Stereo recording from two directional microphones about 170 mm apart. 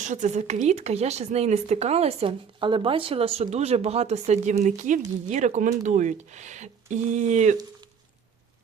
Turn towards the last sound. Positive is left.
turn(degrees=-45)  # may be behind; listen again after turning